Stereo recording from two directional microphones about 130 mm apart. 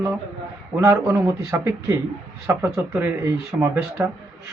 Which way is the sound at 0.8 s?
20° right (ahead or behind).